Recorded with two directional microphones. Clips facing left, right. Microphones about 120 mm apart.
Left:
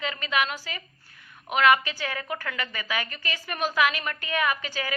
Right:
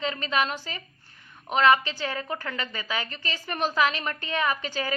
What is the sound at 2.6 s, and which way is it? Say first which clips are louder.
A woman's voice: even; 25° right (ahead or behind).